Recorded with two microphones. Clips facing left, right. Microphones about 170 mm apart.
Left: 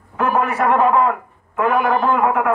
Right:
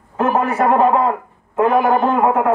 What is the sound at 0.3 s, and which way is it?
A man's voice, 25° right (ahead or behind).